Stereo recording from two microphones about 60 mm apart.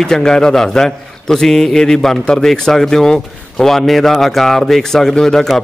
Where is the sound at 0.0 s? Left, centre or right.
Centre.